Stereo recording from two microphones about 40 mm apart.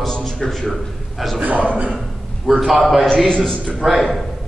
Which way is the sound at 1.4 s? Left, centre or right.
Right.